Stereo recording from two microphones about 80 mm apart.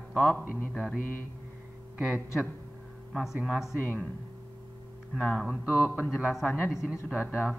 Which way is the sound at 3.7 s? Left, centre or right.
Centre.